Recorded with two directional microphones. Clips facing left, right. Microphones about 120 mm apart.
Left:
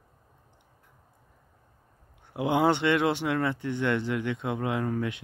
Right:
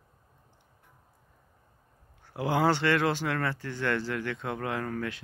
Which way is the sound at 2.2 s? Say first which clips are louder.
Left 2 dB; 20° left (ahead or behind).